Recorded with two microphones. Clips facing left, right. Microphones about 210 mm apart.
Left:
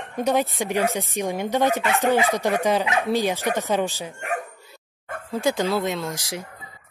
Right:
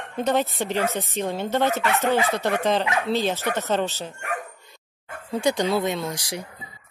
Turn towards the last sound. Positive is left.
turn(degrees=0)  # may be behind; listen again after turning